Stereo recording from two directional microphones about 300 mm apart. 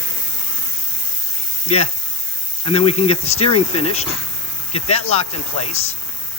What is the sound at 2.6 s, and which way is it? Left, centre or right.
Speech, centre.